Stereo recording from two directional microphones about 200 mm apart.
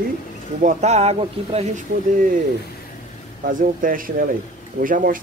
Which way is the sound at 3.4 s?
45° right (ahead or behind).